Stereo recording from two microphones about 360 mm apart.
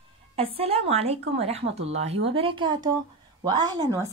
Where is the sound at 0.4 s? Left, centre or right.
Centre.